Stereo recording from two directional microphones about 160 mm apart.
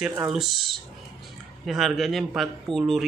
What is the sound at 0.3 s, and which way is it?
Speech, centre (ahead or behind).